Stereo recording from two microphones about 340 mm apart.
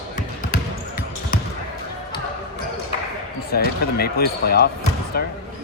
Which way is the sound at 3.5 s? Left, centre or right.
Left.